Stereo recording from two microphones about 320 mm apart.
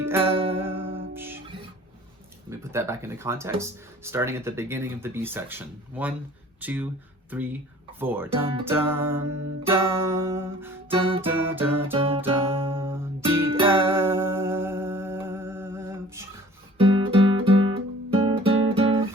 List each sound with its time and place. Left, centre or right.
0.0 s music: centre
2.5 s speech: centre
7.9 s speech: centre
10.8 s music: centre
11.3 s speech: centre
11.8 s music: centre